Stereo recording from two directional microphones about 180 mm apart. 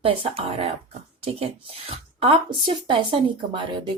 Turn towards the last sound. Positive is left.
turn(degrees=-25)  # may be behind; listen again after turning